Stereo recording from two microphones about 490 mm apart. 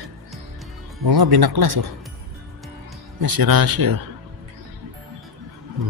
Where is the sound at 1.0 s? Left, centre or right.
Right.